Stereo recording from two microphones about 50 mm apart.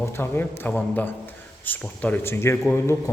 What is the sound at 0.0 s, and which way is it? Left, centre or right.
Speech, left.